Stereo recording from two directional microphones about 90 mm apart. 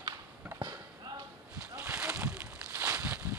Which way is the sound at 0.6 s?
55° right (ahead or behind).